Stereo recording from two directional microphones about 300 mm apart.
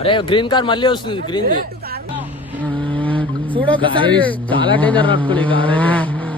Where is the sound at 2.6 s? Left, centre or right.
Centre.